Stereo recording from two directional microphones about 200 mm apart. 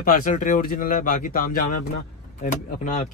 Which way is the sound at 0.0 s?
45° left (ahead or behind).